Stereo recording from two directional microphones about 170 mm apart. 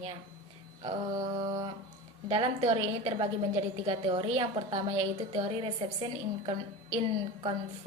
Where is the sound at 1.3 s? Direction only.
25° right (ahead or behind).